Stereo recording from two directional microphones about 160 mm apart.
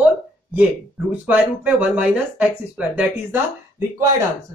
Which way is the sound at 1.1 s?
10° right (ahead or behind).